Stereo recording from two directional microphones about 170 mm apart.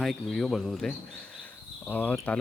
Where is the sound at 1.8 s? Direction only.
10° left (ahead or behind).